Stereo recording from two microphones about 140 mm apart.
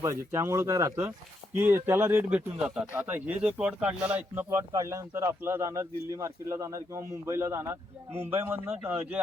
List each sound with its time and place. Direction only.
0.0 s speech: 20° right (ahead or behind)
4.4 s speech: 25° right (ahead or behind)